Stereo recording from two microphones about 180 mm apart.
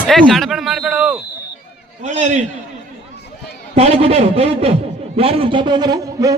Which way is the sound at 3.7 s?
35° right (ahead or behind).